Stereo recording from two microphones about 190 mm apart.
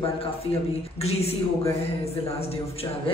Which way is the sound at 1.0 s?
35° left (ahead or behind).